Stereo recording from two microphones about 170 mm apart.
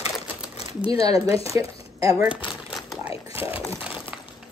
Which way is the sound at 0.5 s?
35° left (ahead or behind).